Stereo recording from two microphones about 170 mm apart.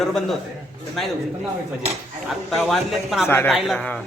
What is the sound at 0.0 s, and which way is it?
Speech, centre (ahead or behind).